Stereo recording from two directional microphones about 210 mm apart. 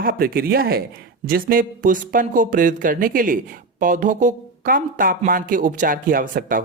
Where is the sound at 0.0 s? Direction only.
45° right (ahead or behind).